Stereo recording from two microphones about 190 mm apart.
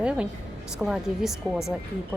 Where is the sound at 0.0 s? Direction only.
5° right (ahead or behind).